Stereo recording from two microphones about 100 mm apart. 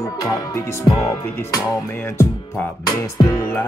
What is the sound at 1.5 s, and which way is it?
Speech, 35° left (ahead or behind).